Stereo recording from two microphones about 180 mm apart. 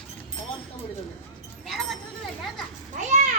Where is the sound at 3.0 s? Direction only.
40° right (ahead or behind).